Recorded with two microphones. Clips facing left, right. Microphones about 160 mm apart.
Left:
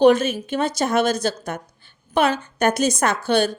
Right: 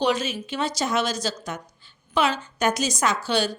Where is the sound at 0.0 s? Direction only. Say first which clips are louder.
Left 9 dB; 50° left (ahead or behind).